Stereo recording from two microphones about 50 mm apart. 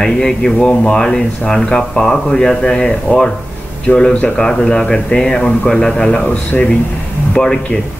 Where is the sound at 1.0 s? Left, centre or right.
Centre.